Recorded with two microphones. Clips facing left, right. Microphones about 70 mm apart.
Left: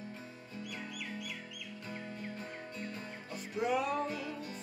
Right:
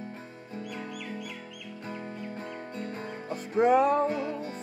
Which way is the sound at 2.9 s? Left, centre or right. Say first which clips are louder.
Right 8 dB; right.